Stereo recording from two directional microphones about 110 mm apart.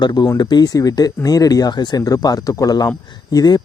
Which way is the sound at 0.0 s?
40° left (ahead or behind).